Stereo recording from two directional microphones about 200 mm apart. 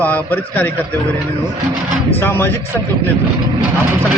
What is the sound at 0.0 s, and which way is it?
Speech, 10° left (ahead or behind).